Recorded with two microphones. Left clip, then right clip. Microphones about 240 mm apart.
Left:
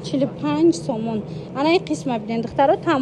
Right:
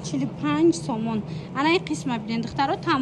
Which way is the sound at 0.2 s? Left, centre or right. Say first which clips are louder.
Left 3 dB; centre.